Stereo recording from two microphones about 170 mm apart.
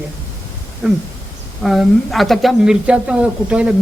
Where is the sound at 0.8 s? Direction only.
5° right (ahead or behind).